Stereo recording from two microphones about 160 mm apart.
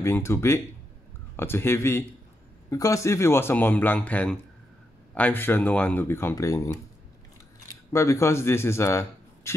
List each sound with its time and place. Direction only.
0.0 s speech: 15° left (ahead or behind)
7.9 s a man's voice: 20° left (ahead or behind)